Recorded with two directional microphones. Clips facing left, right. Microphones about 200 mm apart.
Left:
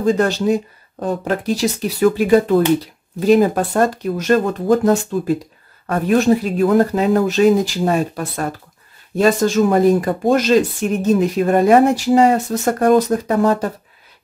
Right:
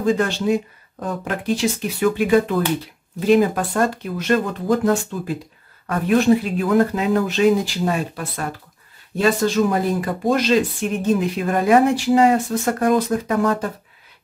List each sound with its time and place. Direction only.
0.0 s speech: 40° left (ahead or behind)